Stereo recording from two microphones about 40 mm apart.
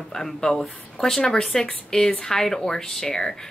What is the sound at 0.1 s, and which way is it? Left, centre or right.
Speech, centre.